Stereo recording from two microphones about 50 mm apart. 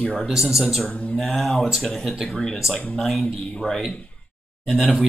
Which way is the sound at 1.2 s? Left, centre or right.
Centre.